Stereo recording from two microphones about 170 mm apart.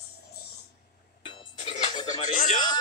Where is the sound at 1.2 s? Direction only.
30° left (ahead or behind).